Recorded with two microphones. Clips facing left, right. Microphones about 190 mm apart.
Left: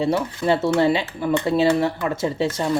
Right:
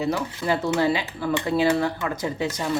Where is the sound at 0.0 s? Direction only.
25° left (ahead or behind).